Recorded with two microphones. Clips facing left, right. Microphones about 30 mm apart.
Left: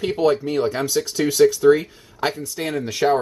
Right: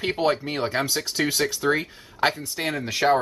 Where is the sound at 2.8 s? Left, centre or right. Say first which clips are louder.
Left 1 dB; right.